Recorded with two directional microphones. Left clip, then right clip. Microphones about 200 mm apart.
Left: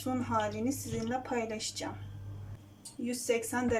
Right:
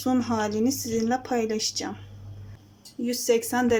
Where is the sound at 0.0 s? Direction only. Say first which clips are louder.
Right 6 dB; 35° right (ahead or behind).